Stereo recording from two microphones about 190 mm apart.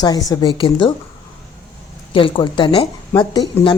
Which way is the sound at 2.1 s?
25° left (ahead or behind).